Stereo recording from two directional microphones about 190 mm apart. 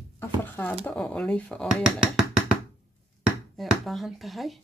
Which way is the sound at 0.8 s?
5° left (ahead or behind).